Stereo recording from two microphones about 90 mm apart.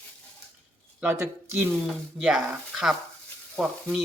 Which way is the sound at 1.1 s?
35° right (ahead or behind).